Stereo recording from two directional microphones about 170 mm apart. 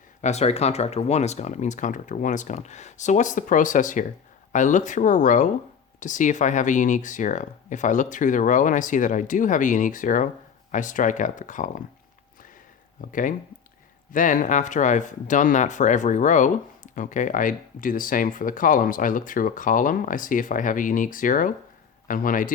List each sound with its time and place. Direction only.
0.2 s speech: 40° left (ahead or behind)
13.0 s speech: 50° left (ahead or behind)